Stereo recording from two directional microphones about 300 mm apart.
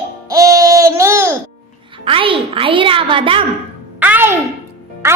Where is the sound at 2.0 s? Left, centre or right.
Centre.